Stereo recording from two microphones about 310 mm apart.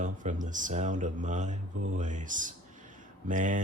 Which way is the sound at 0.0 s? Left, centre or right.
Right.